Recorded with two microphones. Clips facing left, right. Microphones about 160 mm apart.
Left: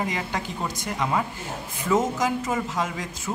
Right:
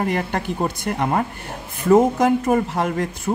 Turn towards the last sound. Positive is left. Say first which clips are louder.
# right 7 dB
turn(degrees=-60)  # may be behind; listen again after turning